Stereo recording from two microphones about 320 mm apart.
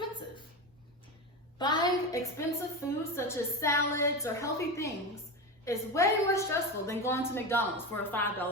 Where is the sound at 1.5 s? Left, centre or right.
Centre.